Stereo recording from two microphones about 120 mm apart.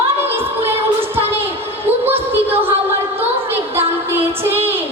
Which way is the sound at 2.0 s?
20° right (ahead or behind).